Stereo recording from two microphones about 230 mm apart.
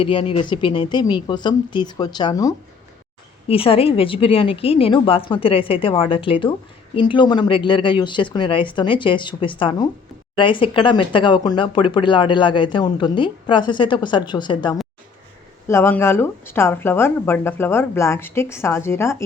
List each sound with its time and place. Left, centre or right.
0.0 s speech: left